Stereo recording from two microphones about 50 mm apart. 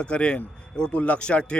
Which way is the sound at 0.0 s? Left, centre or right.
Left.